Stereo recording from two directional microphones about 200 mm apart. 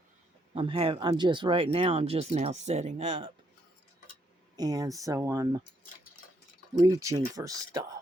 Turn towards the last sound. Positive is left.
turn(degrees=-20)  # may be behind; listen again after turning